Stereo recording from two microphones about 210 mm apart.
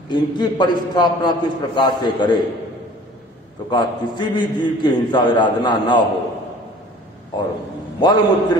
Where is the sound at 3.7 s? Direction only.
20° left (ahead or behind).